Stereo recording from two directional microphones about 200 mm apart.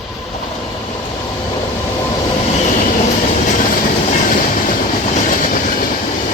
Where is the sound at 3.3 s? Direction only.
40° left (ahead or behind).